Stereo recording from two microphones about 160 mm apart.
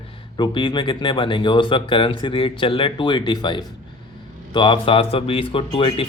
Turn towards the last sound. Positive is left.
turn(degrees=35)  # may be behind; listen again after turning